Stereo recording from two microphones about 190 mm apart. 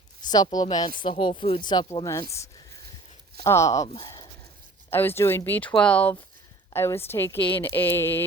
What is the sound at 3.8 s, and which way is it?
Speech, 35° left (ahead or behind).